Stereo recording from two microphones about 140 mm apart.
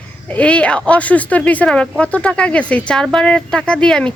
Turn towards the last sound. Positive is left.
turn(degrees=5)  # may be behind; listen again after turning